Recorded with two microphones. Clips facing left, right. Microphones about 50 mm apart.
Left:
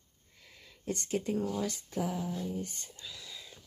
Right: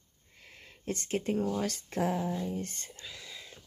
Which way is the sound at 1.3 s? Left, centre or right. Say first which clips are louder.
Right 2 dB; right.